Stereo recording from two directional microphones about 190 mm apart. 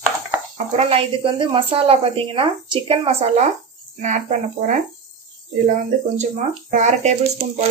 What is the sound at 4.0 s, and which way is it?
Speech, 40° right (ahead or behind).